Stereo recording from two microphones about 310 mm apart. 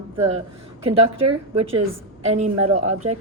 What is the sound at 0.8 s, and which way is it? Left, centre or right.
A woman's voice, centre.